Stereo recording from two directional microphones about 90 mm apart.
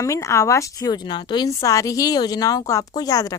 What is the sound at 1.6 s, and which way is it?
A woman's voice, 35° left (ahead or behind).